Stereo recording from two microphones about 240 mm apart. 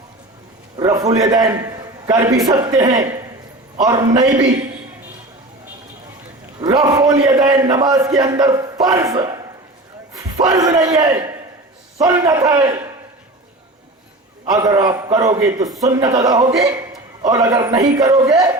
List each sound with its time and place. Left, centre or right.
0.8 s a man's voice: centre
6.6 s a man's voice: centre
10.4 s a man's voice: centre
14.5 s a man's voice: centre